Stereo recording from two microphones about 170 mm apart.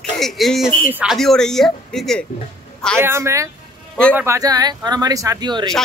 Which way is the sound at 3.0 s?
15° right (ahead or behind).